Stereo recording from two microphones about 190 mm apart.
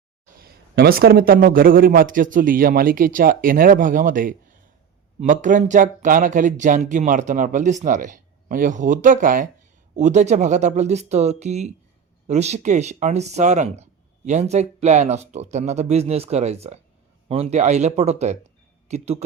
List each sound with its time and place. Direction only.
0.3 s a man's voice: 55° right (ahead or behind); by 19.2 s 35° right (ahead or behind)